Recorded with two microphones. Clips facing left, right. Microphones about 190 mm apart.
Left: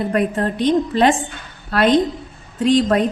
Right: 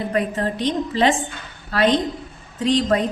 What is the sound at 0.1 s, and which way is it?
A woman's voice, 55° left (ahead or behind).